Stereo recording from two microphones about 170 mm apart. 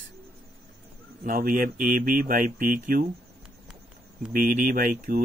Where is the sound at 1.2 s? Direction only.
55° right (ahead or behind).